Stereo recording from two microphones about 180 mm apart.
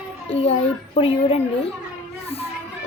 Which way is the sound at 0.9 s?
35° left (ahead or behind).